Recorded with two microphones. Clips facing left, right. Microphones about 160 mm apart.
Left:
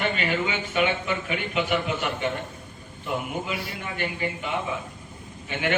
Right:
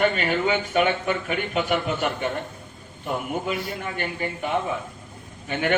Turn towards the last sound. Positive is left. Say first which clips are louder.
# right 3 dB
turn(degrees=-45)  # may be behind; listen again after turning